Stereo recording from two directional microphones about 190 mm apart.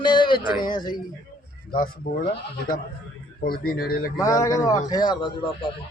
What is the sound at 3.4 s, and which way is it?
Speech, 50° left (ahead or behind).